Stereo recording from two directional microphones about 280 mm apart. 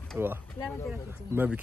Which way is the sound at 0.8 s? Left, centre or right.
Centre.